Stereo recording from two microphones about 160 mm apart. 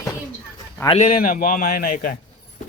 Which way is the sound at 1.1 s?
60° left (ahead or behind).